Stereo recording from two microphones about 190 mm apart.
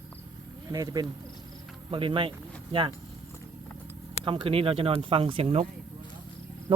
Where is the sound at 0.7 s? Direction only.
20° right (ahead or behind).